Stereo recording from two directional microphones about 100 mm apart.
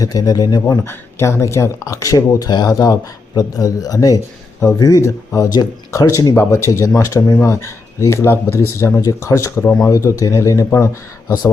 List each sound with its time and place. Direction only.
0.0 s speech: 40° left (ahead or behind)
0.9 s speech: 25° left (ahead or behind)